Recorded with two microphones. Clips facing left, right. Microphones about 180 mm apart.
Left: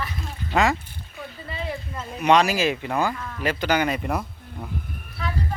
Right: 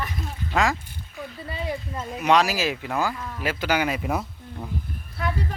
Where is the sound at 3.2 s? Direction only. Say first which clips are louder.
Even; 15° right (ahead or behind).